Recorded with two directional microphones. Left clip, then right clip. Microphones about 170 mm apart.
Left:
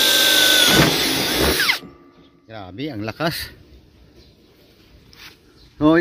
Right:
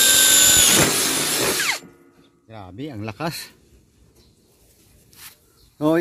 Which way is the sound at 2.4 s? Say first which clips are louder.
Left 4 dB; 5° right (ahead or behind).